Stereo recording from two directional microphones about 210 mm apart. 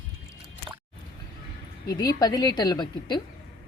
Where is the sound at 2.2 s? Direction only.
20° left (ahead or behind).